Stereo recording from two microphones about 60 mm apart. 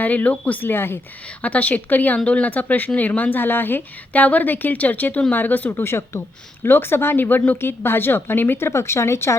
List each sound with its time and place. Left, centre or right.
0.0 s speech: left
1.4 s speech: left
5.8 s speech: left